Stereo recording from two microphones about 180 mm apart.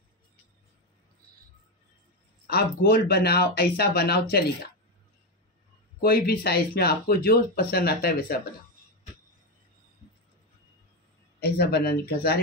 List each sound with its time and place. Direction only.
2.4 s speech: 60° left (ahead or behind)
5.9 s speech: 60° left (ahead or behind)
11.3 s speech: 60° left (ahead or behind)